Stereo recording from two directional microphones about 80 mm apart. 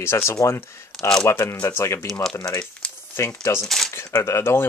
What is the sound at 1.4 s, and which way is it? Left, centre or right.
Speech, left.